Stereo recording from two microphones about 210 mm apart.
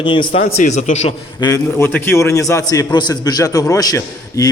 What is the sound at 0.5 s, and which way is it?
Speech, 35° left (ahead or behind).